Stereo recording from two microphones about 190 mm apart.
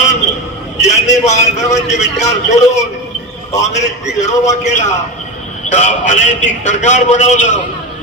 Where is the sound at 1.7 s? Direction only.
35° left (ahead or behind).